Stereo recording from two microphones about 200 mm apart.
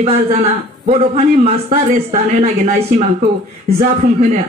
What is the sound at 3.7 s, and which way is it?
Speech, 50° right (ahead or behind).